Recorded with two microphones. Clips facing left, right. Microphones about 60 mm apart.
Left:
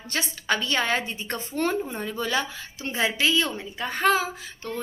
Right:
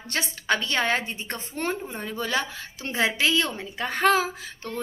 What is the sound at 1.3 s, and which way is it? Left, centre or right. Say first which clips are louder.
Speech: left 4 dB; right.